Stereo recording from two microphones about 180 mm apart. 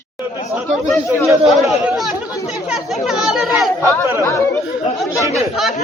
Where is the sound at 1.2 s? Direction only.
Centre (ahead or behind).